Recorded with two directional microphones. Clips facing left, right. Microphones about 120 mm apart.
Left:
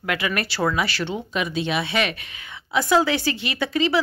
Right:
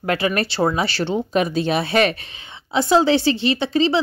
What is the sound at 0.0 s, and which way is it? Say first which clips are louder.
Speech: right 5 dB; 35° right (ahead or behind).